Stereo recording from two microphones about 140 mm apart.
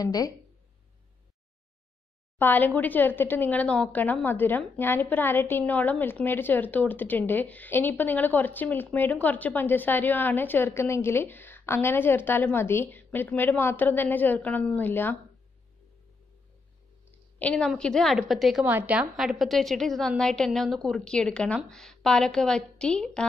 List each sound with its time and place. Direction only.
0.0 s speech: 25° left (ahead or behind)
2.3 s speech: 15° left (ahead or behind)
17.4 s a woman's voice: 5° left (ahead or behind)